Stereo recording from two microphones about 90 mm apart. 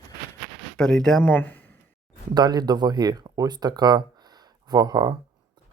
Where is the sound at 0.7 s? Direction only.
10° left (ahead or behind).